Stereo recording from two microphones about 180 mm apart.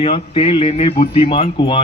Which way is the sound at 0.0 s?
30° left (ahead or behind).